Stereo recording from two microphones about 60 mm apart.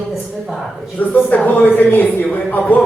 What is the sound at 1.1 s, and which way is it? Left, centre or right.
Speech, left.